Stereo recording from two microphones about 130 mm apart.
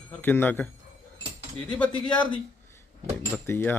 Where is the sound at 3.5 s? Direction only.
15° left (ahead or behind).